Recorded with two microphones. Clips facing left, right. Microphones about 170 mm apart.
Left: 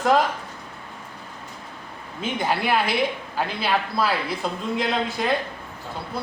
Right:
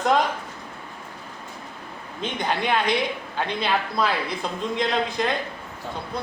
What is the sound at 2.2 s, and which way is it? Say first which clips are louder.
A woman's voice: left 1 dB; 5° left (ahead or behind).